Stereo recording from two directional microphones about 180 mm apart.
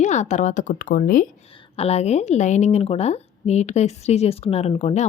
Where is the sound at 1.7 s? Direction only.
35° left (ahead or behind).